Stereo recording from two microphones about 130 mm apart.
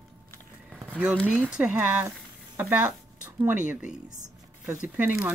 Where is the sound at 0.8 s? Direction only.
15° right (ahead or behind).